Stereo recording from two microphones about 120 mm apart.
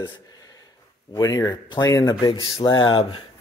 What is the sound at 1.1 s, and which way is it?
Speech, 30° left (ahead or behind).